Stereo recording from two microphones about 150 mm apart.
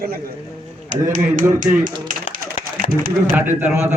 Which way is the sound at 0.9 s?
55° right (ahead or behind).